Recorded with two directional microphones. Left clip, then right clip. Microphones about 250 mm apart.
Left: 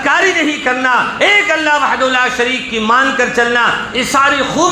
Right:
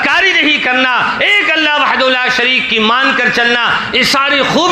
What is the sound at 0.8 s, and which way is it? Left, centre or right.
A man's voice, right.